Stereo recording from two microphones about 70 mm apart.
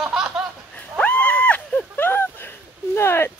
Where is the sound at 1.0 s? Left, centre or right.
Centre; by 3.3 s left.